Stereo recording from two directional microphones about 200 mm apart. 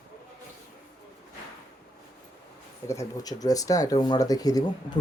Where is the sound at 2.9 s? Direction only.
15° left (ahead or behind).